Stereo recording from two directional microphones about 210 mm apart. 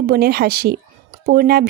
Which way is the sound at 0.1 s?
45° right (ahead or behind).